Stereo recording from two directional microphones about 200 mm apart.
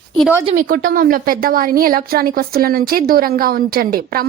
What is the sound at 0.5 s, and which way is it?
A woman's voice, 40° right (ahead or behind).